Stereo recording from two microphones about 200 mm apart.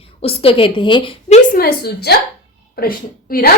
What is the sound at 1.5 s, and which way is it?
A woman's voice, 50° left (ahead or behind).